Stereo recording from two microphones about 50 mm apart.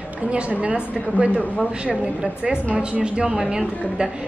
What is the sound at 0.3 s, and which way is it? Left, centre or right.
Speech, right.